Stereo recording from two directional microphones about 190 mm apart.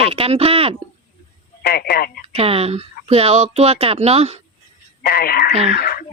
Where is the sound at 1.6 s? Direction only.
55° left (ahead or behind).